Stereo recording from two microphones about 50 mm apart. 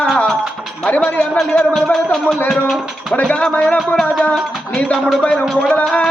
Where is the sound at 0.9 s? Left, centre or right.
Left.